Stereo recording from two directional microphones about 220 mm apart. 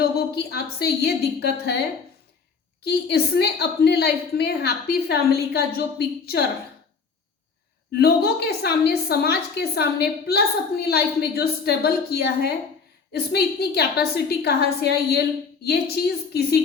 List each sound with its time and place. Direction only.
0.0 s a woman's voice: 45° left (ahead or behind)
2.8 s a woman's voice: 45° left (ahead or behind)
7.9 s a woman's voice: 45° left (ahead or behind)